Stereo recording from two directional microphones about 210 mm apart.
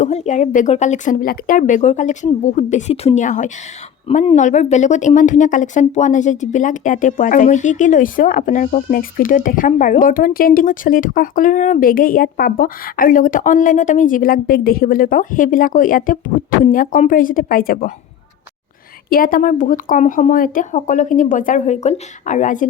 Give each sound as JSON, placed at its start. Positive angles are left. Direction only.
{"t": 0.0, "sound": "speech", "side_deg": 35}
{"t": 19.1, "sound": "speech", "side_deg": 40}